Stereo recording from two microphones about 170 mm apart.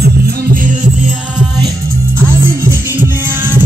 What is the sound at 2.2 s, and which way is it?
Music, 15° right (ahead or behind).